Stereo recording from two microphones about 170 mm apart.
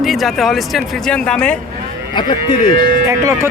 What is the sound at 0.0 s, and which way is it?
Speech, centre (ahead or behind).